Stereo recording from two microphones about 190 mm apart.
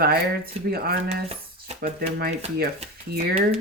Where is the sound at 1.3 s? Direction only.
30° right (ahead or behind).